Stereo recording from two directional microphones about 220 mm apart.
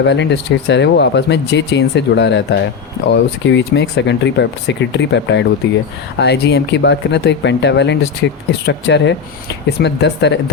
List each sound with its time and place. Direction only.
0.0 s speech: 50° left (ahead or behind)